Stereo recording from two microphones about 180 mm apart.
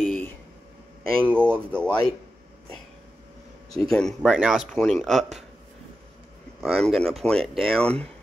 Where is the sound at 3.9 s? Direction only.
5° left (ahead or behind).